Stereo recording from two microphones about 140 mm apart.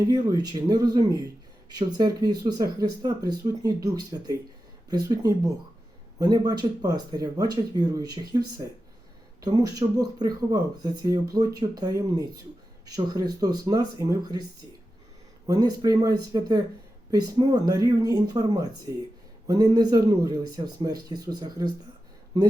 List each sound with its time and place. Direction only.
0.1 s speech: 30° right (ahead or behind)
15.4 s speech: 25° right (ahead or behind)